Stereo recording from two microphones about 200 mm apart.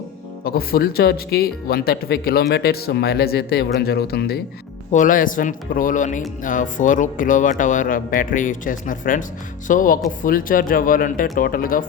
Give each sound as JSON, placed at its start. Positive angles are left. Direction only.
{"t": 0.4, "sound": "speech", "side_deg": 50}